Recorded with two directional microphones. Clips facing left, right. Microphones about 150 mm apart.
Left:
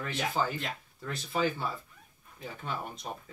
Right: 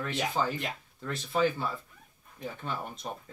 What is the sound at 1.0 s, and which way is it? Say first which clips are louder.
Speech: right 3 dB; centre (ahead or behind).